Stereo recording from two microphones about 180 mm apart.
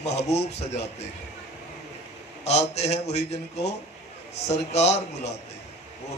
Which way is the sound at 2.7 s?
35° left (ahead or behind).